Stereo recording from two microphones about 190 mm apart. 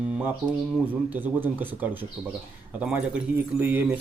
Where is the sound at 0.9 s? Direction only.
10° right (ahead or behind).